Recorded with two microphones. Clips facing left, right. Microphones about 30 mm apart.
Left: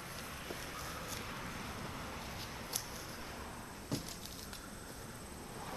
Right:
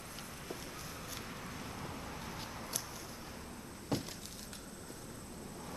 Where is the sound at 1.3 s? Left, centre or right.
Centre.